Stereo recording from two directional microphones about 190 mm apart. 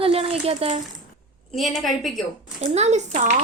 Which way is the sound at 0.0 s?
30° right (ahead or behind).